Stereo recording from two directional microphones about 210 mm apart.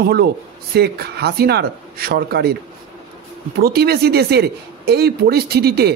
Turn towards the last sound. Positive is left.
turn(degrees=-50)  # may be behind; listen again after turning